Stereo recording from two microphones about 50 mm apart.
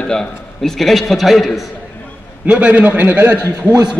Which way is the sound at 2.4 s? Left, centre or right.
Right.